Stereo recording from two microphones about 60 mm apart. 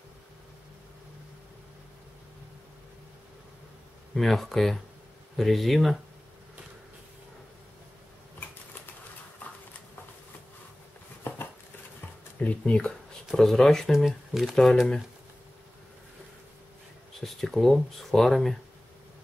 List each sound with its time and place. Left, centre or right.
4.1 s speech: centre
12.4 s speech: left
13.4 s speech: centre
13.9 s speech: centre
17.2 s speech: centre